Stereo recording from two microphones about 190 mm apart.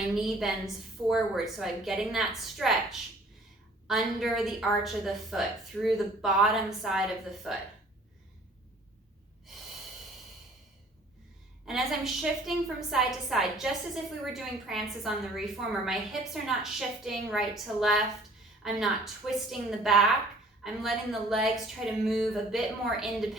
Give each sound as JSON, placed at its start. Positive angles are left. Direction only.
{"t": 0.2, "sound": "a woman's voice", "side_deg": 0}
{"t": 11.6, "sound": "a woman's voice", "side_deg": 0}